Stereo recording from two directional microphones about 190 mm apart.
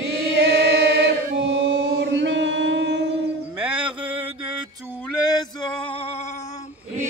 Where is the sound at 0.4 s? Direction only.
60° right (ahead or behind).